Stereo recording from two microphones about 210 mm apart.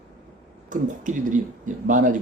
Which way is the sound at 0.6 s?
40° right (ahead or behind).